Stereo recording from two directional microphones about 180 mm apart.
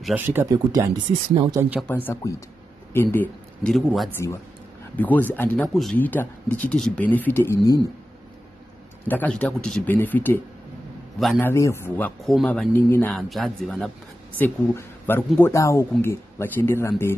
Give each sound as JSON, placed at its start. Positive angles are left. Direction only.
{"t": 0.0, "sound": "speech", "side_deg": -10}
{"t": 1.9, "sound": "speech", "side_deg": 10}
{"t": 3.7, "sound": "speech", "side_deg": 0}
{"t": 9.0, "sound": "speech", "side_deg": 10}
{"t": 11.4, "sound": "speech", "side_deg": 15}
{"t": 12.3, "sound": "speech", "side_deg": 0}
{"t": 13.1, "sound": "speech", "side_deg": 0}